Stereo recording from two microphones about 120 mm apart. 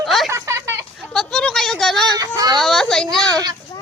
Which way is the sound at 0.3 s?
25° right (ahead or behind).